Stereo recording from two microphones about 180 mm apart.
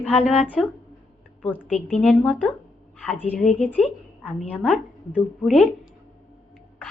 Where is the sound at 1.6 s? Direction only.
Centre (ahead or behind).